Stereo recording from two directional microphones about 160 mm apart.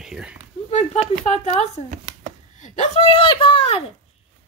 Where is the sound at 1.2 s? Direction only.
45° left (ahead or behind).